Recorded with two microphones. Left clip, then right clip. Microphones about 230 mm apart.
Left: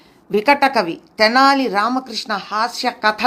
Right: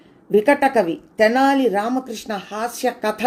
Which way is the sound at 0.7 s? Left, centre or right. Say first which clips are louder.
Even; left.